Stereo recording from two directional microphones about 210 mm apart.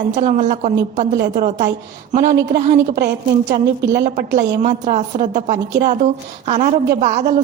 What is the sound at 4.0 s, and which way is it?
A woman's voice, 35° right (ahead or behind).